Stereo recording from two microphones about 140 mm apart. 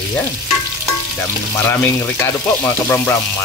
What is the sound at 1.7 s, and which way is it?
Speech, 15° left (ahead or behind).